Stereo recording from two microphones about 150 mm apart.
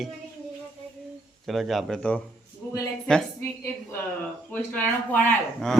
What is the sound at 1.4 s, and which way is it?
Speech, centre (ahead or behind).